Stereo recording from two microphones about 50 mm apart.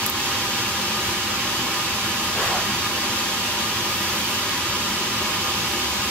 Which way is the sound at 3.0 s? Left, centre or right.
Centre.